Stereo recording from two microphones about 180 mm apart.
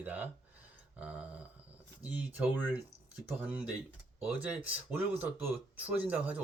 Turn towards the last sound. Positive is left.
turn(degrees=-10)  # may be behind; listen again after turning